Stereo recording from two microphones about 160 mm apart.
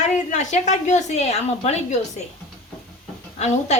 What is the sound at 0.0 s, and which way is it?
A woman's voice, 45° left (ahead or behind).